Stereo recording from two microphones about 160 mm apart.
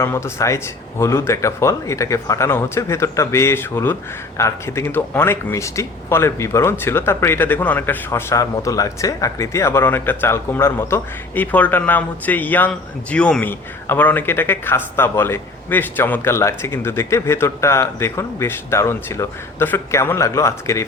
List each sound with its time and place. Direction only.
0.0 s speech: 15° left (ahead or behind)